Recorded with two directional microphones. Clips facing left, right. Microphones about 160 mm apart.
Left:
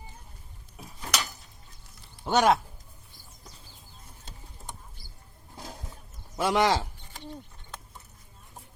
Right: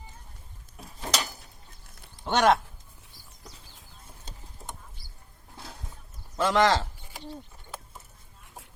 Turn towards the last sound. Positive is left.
turn(degrees=10)  # may be behind; listen again after turning